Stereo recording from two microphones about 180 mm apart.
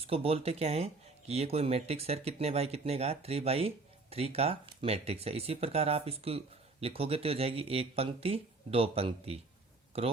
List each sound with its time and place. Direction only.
0.0 s speech: 35° right (ahead or behind)